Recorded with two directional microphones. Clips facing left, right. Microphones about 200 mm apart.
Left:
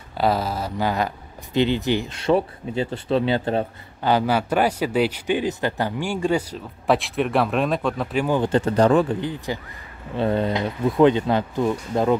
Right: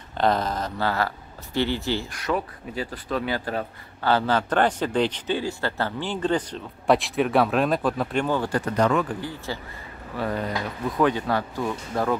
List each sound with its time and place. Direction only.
0.2 s speech: 5° left (ahead or behind)
8.3 s speech: 20° left (ahead or behind)